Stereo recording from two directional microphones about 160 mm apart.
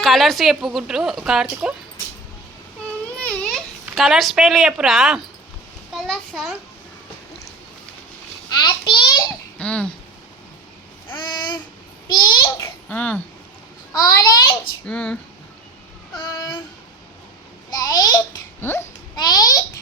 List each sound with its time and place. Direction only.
0.0 s a woman's voice: centre (ahead or behind)
3.2 s baby cry: 10° left (ahead or behind)
3.9 s a woman's voice: centre (ahead or behind)
8.4 s a sound: 30° left (ahead or behind)
9.6 s speech: 5° left (ahead or behind)
11.1 s babbling: 25° left (ahead or behind)
12.5 s a child's voice: 10° left (ahead or behind)
13.9 s a child's voice: 20° left (ahead or behind)
14.8 s speech: 5° left (ahead or behind)
16.1 s a child's voice: 20° left (ahead or behind)
17.7 s a child's voice: 25° left (ahead or behind)
19.1 s a child's voice: 25° left (ahead or behind)